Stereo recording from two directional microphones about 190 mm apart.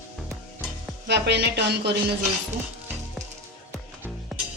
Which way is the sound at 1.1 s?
60° right (ahead or behind).